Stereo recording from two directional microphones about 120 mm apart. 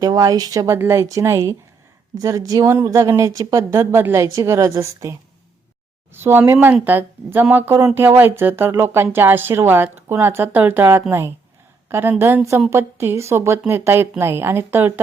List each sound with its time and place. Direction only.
0.0 s speech: 30° right (ahead or behind)
6.1 s a woman's voice: 20° right (ahead or behind)